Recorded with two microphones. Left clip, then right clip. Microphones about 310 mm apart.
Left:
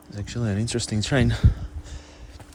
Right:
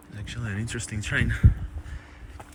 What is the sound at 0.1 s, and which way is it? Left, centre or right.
Speech, centre.